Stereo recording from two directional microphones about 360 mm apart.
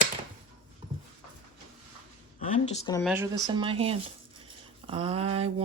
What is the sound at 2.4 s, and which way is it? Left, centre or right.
Speech, centre.